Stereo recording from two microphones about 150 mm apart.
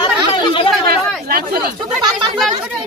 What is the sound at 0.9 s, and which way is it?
Chatter, 85° right.